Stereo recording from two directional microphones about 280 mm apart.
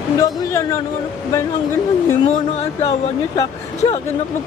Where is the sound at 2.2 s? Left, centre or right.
Left.